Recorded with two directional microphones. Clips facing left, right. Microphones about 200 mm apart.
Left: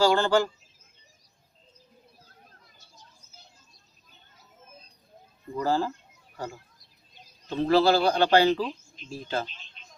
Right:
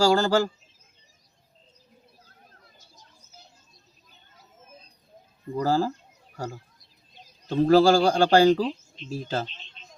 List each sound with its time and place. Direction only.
0.0 s speech: 40° right (ahead or behind)
5.5 s speech: 40° right (ahead or behind)